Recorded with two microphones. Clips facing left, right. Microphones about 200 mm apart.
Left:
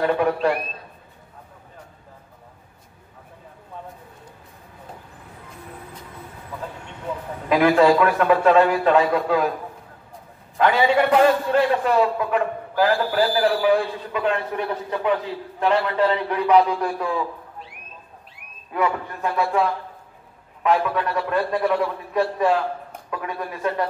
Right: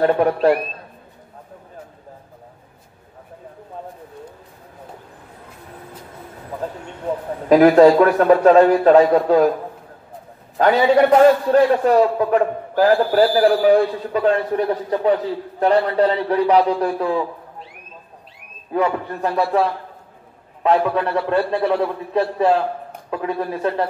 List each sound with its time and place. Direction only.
0.0 s a man's voice: 40° right (ahead or behind)
7.4 s a man's voice: 40° right (ahead or behind)
10.6 s a man's voice: 40° right (ahead or behind)
18.7 s a man's voice: 30° right (ahead or behind)
20.6 s a man's voice: 30° right (ahead or behind)